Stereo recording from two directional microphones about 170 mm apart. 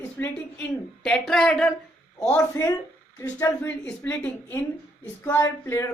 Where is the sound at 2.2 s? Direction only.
15° left (ahead or behind).